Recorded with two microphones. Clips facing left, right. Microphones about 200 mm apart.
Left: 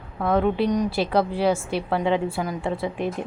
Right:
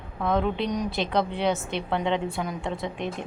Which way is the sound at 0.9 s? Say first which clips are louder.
Left 4 dB; 5° left (ahead or behind).